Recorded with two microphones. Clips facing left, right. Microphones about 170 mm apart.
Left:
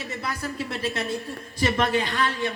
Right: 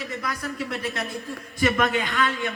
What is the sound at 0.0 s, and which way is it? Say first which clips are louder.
A woman's voice: even; 30° left (ahead or behind).